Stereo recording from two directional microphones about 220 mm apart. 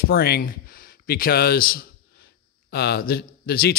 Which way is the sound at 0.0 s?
45° left (ahead or behind).